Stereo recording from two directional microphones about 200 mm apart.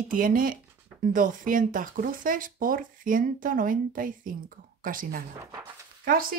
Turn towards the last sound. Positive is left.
turn(degrees=-45)  # may be behind; listen again after turning